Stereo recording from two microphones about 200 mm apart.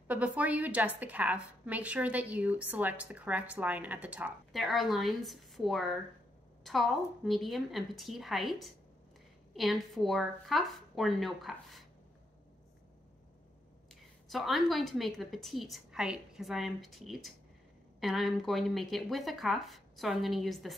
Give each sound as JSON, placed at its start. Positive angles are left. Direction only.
{"t": 0.1, "sound": "a woman's voice", "side_deg": -5}
{"t": 14.3, "sound": "a woman's voice", "side_deg": 0}